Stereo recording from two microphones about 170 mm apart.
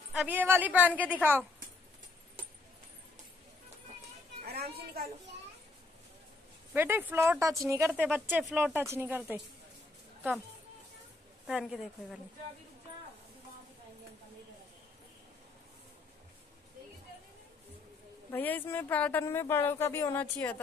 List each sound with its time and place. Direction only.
0.1 s speech: 10° right (ahead or behind)
4.5 s children playing: 65° right (ahead or behind)
6.7 s speech: 10° right (ahead or behind)
11.4 s a woman's voice: centre (ahead or behind)
18.3 s speech: 10° left (ahead or behind)